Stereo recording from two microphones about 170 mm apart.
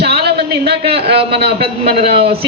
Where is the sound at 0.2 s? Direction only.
70° right (ahead or behind).